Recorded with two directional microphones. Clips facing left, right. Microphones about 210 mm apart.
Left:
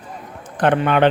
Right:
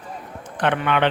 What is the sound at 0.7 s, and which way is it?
Speech, 40° left (ahead or behind).